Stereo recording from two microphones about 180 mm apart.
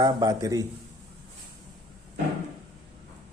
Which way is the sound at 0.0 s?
20° right (ahead or behind).